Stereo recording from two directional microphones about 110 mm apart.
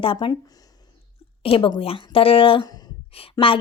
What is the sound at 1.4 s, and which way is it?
A woman's voice, 50° left (ahead or behind).